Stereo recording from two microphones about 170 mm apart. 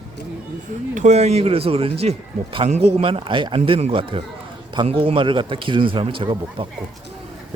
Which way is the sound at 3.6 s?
40° right (ahead or behind).